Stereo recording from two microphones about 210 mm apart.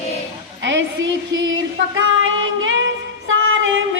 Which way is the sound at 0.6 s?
65° right (ahead or behind).